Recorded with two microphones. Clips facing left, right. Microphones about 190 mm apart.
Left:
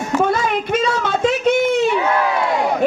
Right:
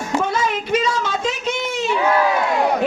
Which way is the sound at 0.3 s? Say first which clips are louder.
Left 2 dB; 55° left (ahead or behind).